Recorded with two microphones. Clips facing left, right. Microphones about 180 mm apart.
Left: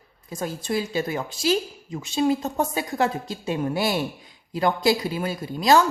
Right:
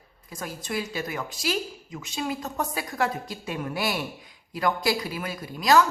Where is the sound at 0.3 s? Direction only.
25° left (ahead or behind).